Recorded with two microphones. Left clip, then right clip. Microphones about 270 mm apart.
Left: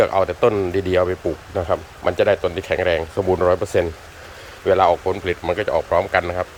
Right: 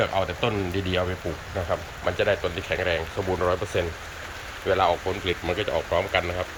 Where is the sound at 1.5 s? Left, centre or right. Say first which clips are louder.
Left 5 dB; left.